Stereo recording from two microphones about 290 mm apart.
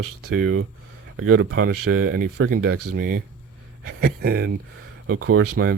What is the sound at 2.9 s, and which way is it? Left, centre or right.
Speech, right.